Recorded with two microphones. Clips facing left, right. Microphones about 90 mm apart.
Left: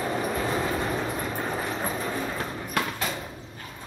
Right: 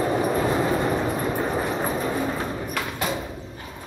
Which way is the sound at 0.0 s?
15° right (ahead or behind).